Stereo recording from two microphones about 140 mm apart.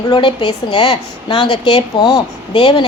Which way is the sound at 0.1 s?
35° left (ahead or behind).